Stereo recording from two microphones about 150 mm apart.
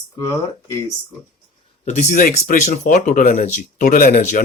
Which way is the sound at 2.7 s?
60° left (ahead or behind).